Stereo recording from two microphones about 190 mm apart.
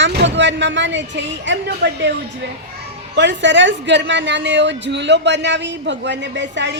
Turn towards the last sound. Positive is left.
turn(degrees=-70)  # may be behind; listen again after turning